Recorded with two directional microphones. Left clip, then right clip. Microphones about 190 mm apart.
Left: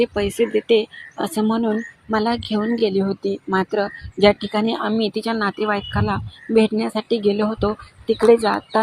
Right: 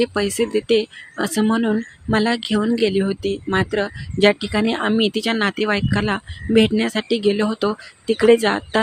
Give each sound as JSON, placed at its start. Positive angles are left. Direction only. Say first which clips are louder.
{"t": 0.0, "sound": "speech", "louder": "left 1 dB", "side_deg": -10}